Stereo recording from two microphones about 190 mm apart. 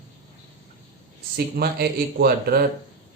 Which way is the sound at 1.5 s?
55° right (ahead or behind).